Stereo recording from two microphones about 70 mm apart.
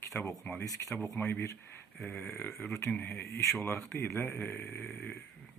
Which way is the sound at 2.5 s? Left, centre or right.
Centre.